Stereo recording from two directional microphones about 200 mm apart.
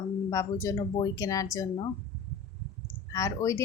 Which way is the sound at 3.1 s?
15° left (ahead or behind).